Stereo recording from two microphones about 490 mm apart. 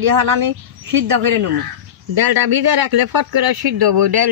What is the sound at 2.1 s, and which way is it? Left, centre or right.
Speech, right.